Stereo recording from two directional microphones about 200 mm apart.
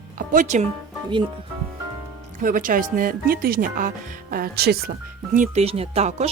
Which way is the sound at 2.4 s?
45° right (ahead or behind).